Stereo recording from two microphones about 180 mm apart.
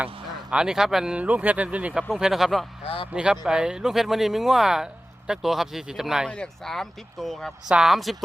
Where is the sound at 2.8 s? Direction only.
30° left (ahead or behind).